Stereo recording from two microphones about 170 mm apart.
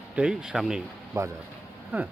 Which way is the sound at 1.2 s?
15° right (ahead or behind).